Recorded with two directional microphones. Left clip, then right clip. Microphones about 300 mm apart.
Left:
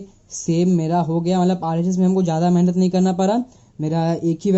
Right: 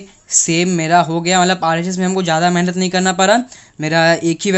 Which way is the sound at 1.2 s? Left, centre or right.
Centre.